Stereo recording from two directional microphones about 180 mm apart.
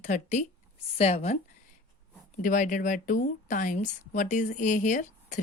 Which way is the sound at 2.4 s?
45° left (ahead or behind).